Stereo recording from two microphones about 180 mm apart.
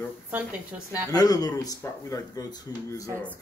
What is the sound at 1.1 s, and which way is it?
Speech, 20° left (ahead or behind).